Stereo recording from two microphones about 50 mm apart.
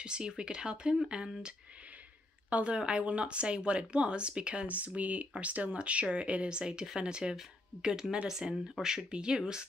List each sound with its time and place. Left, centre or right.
0.0 s speech: centre
2.5 s speech: right